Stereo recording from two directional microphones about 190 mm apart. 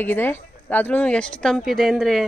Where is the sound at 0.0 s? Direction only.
10° left (ahead or behind).